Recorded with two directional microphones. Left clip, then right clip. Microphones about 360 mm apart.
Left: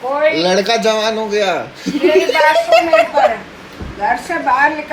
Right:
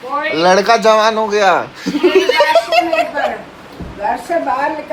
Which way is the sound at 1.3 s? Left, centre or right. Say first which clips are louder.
Right 4 dB; centre.